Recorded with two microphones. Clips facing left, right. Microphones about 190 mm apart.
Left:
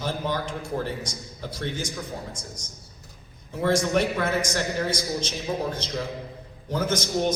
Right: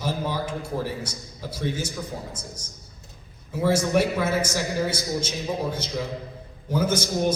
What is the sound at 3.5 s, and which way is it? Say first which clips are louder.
A man's voice: right 1 dB; 10° right (ahead or behind).